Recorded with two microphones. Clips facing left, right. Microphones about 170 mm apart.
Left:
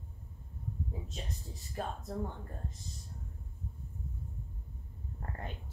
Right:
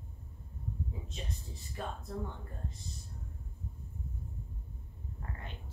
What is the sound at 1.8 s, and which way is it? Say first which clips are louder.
Speech: left 2 dB; 45° left (ahead or behind).